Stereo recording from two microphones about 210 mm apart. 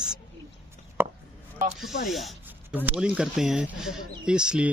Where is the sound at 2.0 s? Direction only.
Centre (ahead or behind).